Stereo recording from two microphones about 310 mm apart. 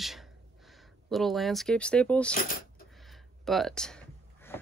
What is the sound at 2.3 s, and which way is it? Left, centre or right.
Speech, left.